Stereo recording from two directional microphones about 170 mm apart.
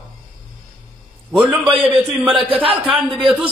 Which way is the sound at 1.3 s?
Centre (ahead or behind).